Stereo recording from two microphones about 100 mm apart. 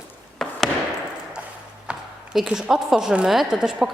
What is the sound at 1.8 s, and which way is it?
A woman's voice, 10° right (ahead or behind).